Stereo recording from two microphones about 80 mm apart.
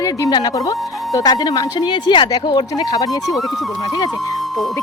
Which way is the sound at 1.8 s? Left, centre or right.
Left.